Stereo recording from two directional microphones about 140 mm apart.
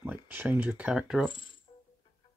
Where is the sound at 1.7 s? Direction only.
50° left (ahead or behind).